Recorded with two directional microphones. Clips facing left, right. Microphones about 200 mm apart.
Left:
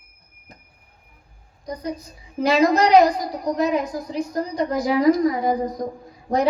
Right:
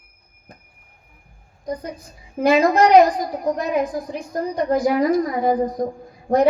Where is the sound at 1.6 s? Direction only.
50° right (ahead or behind).